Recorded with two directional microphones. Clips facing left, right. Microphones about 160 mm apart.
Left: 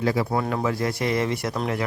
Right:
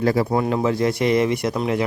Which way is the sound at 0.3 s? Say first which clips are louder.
Right 5 dB; 25° right (ahead or behind).